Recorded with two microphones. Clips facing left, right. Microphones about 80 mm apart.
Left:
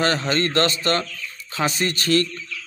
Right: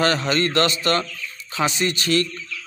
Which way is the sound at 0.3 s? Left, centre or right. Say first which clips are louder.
Right 1 dB; left.